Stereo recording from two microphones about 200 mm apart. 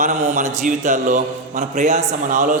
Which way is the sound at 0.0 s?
35° right (ahead or behind).